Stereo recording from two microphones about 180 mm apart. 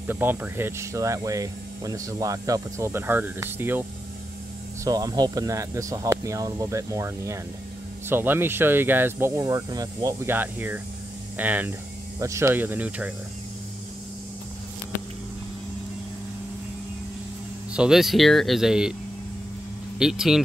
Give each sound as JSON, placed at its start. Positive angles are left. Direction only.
{"t": 0.0, "sound": "speech", "side_deg": -10}
{"t": 4.8, "sound": "speech", "side_deg": -20}
{"t": 17.7, "sound": "speech", "side_deg": -5}
{"t": 20.0, "sound": "speech", "side_deg": -5}